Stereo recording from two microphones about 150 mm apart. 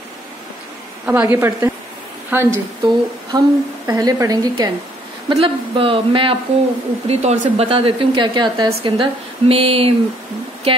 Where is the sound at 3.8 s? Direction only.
25° right (ahead or behind).